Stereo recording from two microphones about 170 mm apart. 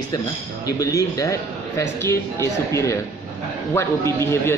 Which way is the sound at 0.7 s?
20° left (ahead or behind).